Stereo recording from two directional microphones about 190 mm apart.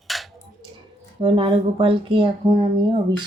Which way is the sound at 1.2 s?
25° right (ahead or behind).